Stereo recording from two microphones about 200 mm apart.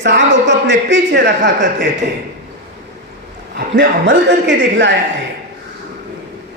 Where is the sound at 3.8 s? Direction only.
60° right (ahead or behind).